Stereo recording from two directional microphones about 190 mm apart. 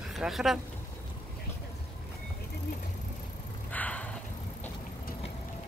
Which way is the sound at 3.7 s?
10° left (ahead or behind).